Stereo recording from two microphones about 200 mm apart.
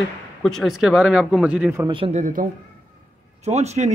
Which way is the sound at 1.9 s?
30° right (ahead or behind).